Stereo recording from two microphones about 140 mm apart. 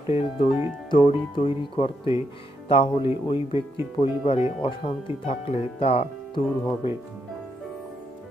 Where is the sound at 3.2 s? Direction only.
40° left (ahead or behind).